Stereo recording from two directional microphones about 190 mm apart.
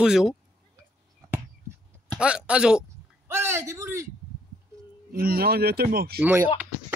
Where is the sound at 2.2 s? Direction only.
5° right (ahead or behind).